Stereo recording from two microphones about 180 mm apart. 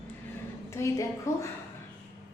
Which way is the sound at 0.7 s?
15° left (ahead or behind).